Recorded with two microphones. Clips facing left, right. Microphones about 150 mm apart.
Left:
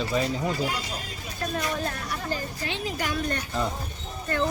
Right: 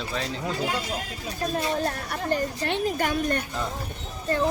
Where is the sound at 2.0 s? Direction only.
60° right (ahead or behind).